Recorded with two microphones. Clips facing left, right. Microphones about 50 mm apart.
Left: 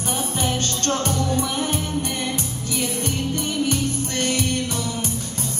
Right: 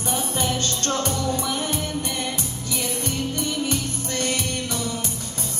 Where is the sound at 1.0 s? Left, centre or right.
Left.